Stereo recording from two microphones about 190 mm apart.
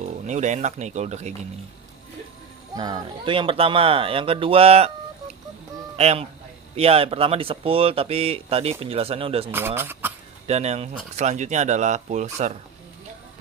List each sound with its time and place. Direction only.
0.3 s speech: 40° right (ahead or behind)
2.7 s speech: 20° right (ahead or behind)
5.9 s speech: 35° right (ahead or behind)
9.5 s speech: 10° right (ahead or behind)
10.4 s speech: 35° right (ahead or behind)